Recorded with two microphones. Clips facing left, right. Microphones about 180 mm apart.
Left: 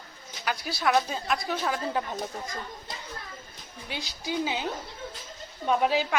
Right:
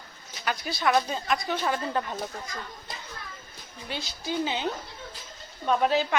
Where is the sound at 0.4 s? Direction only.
5° left (ahead or behind).